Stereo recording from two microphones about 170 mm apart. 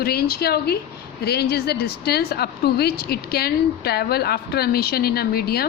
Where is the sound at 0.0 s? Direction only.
65° left (ahead or behind).